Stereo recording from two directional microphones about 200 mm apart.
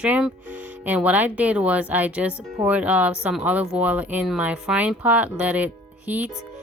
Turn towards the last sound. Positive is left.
turn(degrees=-10)  # may be behind; listen again after turning